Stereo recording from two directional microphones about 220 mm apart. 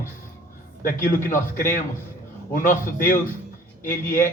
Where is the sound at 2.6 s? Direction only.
40° left (ahead or behind).